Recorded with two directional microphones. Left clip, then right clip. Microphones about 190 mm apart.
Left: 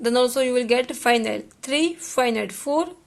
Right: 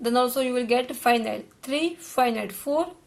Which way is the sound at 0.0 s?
35° left (ahead or behind).